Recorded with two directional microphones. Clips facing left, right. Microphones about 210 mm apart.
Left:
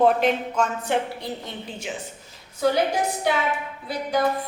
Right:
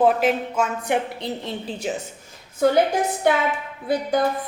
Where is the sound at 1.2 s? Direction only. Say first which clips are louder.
Right 4 dB; 30° right (ahead or behind).